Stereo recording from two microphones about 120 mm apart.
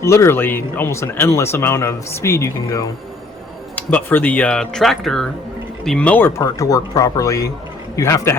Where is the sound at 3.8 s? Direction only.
15° left (ahead or behind).